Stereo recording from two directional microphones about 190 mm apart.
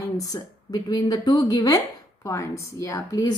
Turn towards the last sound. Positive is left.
turn(degrees=15)  # may be behind; listen again after turning